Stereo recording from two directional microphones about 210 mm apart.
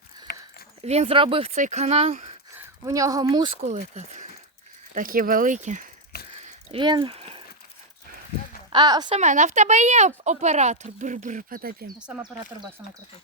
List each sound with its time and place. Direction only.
0.8 s speech: 30° right (ahead or behind)
2.6 s speech: 15° right (ahead or behind)
3.7 s speech: 35° right (ahead or behind)
6.3 s a sound: 30° right (ahead or behind)
8.7 s speech: 20° right (ahead or behind)
9.1 s speech: 35° right (ahead or behind)
11.9 s speech: 5° right (ahead or behind)